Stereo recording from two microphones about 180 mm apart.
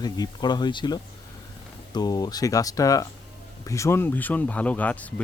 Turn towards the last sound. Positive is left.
turn(degrees=10)  # may be behind; listen again after turning